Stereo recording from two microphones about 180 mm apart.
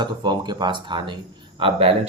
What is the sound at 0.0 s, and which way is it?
Speech, 25° right (ahead or behind).